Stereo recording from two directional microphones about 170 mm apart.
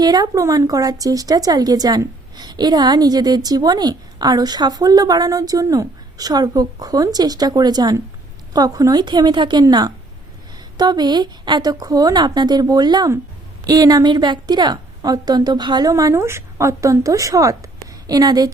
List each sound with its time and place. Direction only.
0.0 s speech: 25° right (ahead or behind)